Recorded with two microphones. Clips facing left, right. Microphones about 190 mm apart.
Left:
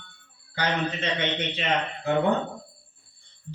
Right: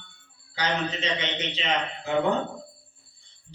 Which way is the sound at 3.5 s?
55° left (ahead or behind).